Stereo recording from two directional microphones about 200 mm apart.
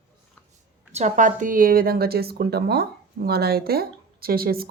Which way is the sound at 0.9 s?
35° right (ahead or behind).